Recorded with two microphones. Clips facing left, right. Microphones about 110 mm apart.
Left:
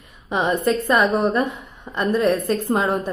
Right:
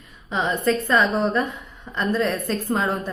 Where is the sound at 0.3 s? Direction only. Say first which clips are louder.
Left 2 dB; 15° left (ahead or behind).